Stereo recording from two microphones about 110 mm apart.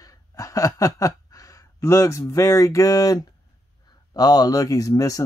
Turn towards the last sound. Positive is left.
turn(degrees=30)  # may be behind; listen again after turning